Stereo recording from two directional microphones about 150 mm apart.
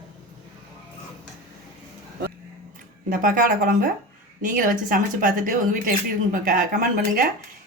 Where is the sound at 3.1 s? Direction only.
65° right (ahead or behind).